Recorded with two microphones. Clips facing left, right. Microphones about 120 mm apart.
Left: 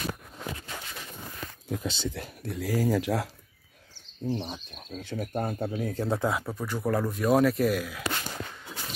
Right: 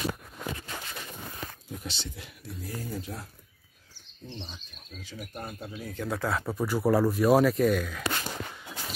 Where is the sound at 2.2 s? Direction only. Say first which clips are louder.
Left 7 dB; 45° left (ahead or behind).